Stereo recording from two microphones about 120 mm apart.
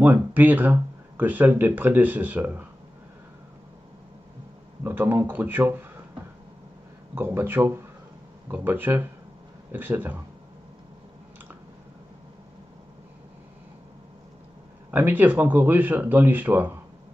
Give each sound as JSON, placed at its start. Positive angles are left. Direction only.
{"t": 0.0, "sound": "speech", "side_deg": -15}
{"t": 4.8, "sound": "speech", "side_deg": -15}
{"t": 7.2, "sound": "speech", "side_deg": -20}
{"t": 14.9, "sound": "speech", "side_deg": -15}